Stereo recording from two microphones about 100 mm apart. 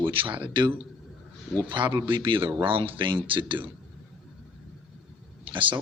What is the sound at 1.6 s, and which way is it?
A man's voice, 55° right (ahead or behind).